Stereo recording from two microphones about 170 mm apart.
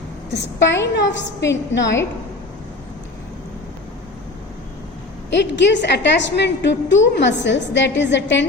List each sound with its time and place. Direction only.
0.3 s a woman's voice: 90° left
5.3 s a woman's voice: 90° left